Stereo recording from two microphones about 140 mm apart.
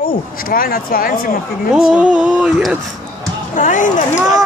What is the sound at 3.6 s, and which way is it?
Speech, 65° left (ahead or behind).